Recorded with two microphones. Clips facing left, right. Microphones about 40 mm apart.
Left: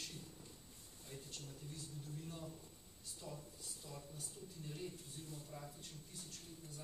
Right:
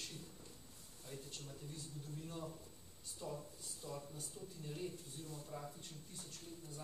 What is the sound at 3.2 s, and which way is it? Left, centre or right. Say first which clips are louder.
Speech: right 5 dB; centre.